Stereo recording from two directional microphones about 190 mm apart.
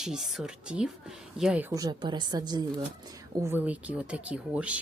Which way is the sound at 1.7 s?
20° right (ahead or behind).